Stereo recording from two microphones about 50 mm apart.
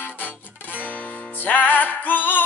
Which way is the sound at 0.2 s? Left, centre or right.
Left.